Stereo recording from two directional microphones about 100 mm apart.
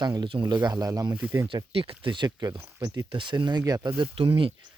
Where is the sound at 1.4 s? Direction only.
65° right (ahead or behind); by 3.9 s 40° right (ahead or behind).